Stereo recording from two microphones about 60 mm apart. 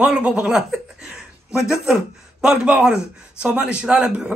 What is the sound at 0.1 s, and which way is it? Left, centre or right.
Speech, centre.